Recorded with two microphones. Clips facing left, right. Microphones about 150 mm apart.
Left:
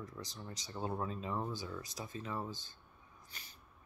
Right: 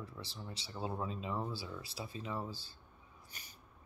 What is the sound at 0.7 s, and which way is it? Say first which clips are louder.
Speech: left 1 dB; 10° right (ahead or behind).